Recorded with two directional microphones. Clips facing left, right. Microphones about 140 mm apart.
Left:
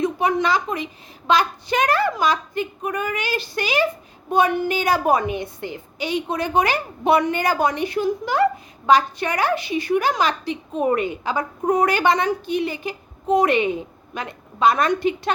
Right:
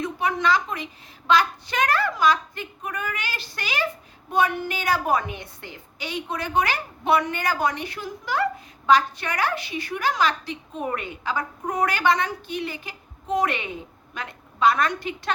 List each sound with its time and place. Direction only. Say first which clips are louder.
0.0 s a woman's voice: left 4 dB; 15° left (ahead or behind)